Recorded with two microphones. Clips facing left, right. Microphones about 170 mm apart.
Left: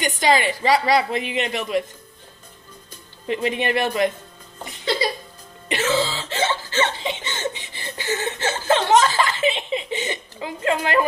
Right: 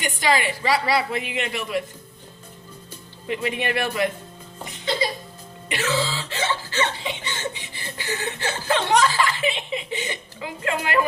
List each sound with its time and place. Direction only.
0.0 s cough: 25° left (ahead or behind)
3.2 s cough: 30° left (ahead or behind)
5.6 s cough: 20° left (ahead or behind)